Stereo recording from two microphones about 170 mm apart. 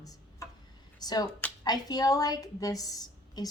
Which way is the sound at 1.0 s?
25° left (ahead or behind).